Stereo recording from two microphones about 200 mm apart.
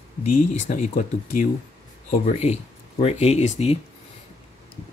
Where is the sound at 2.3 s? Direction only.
30° left (ahead or behind).